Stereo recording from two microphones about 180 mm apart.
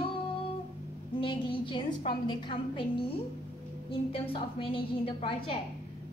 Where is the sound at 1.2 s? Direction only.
30° left (ahead or behind).